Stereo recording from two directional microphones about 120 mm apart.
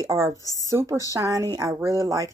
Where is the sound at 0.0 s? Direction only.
20° right (ahead or behind).